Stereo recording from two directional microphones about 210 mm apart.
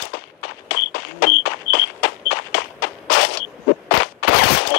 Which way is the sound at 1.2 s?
55° left (ahead or behind).